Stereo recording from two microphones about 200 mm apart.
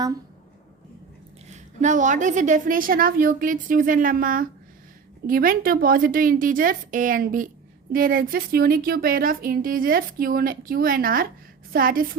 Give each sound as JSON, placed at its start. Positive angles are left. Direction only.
{"t": 1.5, "sound": "speech", "side_deg": -40}